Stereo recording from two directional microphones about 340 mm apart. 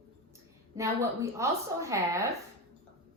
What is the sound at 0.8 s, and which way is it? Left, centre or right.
A woman's voice, centre.